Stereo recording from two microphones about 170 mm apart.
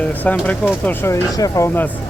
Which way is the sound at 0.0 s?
10° left (ahead or behind).